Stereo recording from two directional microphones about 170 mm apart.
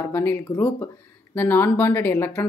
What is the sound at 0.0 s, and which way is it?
Speech, 15° left (ahead or behind).